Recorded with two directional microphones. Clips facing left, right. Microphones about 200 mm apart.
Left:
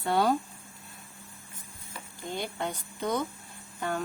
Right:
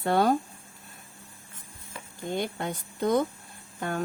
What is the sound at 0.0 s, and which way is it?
Speech, 50° right (ahead or behind).